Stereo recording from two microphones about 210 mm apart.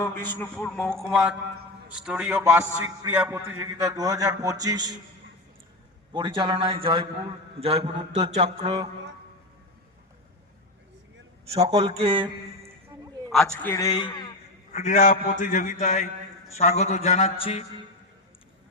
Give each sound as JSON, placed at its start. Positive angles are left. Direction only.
{"t": 0.0, "sound": "a man's voice", "side_deg": 10}
{"t": 6.1, "sound": "a man's voice", "side_deg": -20}
{"t": 11.7, "sound": "a man's voice", "side_deg": -30}
{"t": 13.3, "sound": "a man's voice", "side_deg": 0}
{"t": 14.7, "sound": "a man's voice", "side_deg": 35}